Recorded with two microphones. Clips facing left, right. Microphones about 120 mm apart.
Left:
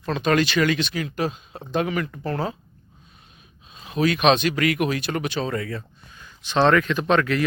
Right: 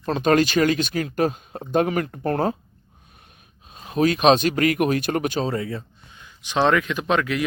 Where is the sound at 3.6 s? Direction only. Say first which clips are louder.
Right 2 dB; 45° right (ahead or behind).